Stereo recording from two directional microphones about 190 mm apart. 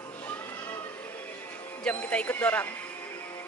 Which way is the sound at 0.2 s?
10° left (ahead or behind).